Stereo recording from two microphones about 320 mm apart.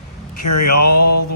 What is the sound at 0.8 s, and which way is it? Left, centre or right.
Speech, left.